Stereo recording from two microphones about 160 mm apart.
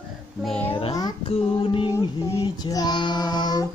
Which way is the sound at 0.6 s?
35° left (ahead or behind).